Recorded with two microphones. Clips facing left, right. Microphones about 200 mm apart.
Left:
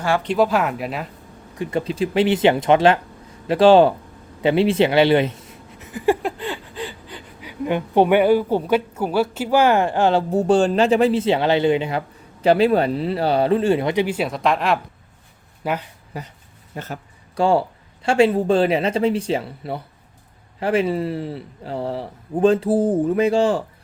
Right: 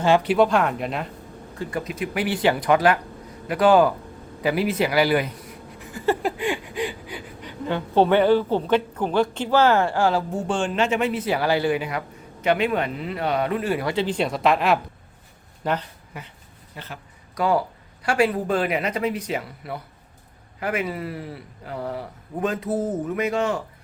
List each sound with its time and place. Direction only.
0.2 s speech: 5° right (ahead or behind)
0.4 s speech: 5° left (ahead or behind)
1.5 s speech: 20° left (ahead or behind)
1.8 s a man's voice: 30° left (ahead or behind)
6.3 s a sound: 15° right (ahead or behind)
7.4 s a woman's voice: 15° left (ahead or behind)
10.3 s a man's voice: 35° left (ahead or behind); by 15.8 s 10° left (ahead or behind)
16.1 s speech: 35° left (ahead or behind)
17.3 s a man's voice: 30° left (ahead or behind)